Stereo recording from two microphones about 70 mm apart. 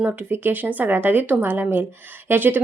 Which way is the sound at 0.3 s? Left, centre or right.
Right.